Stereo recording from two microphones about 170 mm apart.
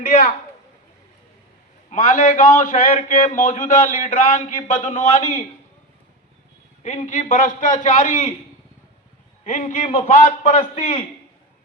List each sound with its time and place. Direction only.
1.9 s a man's voice: 45° left (ahead or behind)
6.8 s a man's voice: 45° left (ahead or behind)
9.4 s a man's voice: 50° left (ahead or behind)